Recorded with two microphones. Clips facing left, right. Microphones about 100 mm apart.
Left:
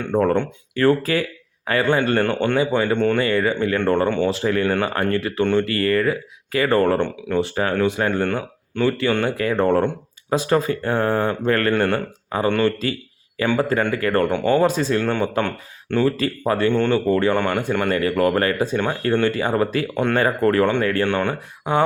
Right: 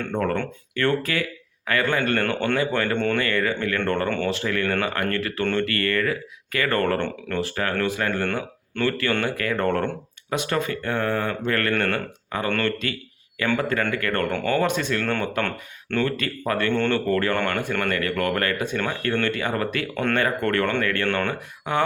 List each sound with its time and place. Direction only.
0.1 s speech: 25° left (ahead or behind)
0.8 s speech: 35° left (ahead or behind); by 4.3 s 15° left (ahead or behind)
4.3 s speech: 30° left (ahead or behind)
6.8 s speech: 15° left (ahead or behind)
8.2 s speech: 10° left (ahead or behind)
9.6 s speech: 15° left (ahead or behind)
10.2 s speech: 30° left (ahead or behind)
12.8 s a sound: 30° left (ahead or behind)
13.6 s speech: 30° left (ahead or behind)
14.6 s speech: 30° left (ahead or behind)
15.0 s speech: 15° left (ahead or behind)
16.0 s speech: 30° left (ahead or behind)
20.1 s speech: 30° left (ahead or behind)
21.1 s speech: 15° left (ahead or behind)